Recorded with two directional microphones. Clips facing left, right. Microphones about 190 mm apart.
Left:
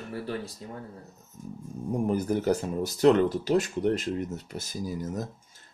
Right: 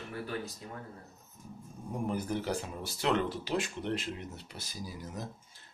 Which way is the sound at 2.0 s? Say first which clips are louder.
Left 8 dB; 40° left (ahead or behind).